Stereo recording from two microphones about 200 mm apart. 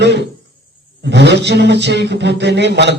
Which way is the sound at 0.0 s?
60° right (ahead or behind).